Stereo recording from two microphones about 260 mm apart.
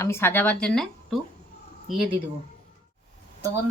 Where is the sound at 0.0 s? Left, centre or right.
Centre.